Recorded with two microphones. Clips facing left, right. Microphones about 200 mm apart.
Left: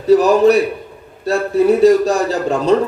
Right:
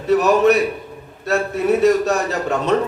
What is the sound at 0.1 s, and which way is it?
A man's voice, 35° left (ahead or behind).